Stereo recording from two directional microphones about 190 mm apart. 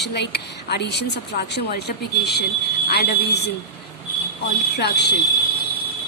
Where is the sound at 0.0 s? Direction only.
60° left (ahead or behind).